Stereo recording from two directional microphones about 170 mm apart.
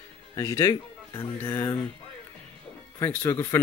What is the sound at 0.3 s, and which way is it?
Speech, 20° left (ahead or behind).